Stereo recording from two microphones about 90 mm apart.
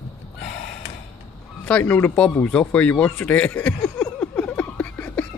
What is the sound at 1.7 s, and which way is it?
Speech, 20° left (ahead or behind).